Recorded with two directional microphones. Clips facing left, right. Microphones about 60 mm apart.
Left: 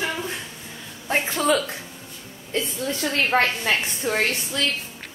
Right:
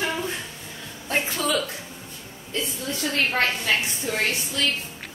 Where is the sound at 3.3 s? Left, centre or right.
Left.